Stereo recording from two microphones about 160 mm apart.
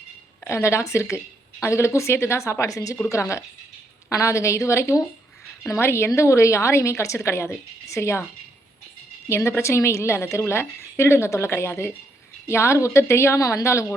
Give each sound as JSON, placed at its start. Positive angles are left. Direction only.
{"t": 0.4, "sound": "a woman's voice", "side_deg": 15}
{"t": 9.3, "sound": "a woman's voice", "side_deg": 15}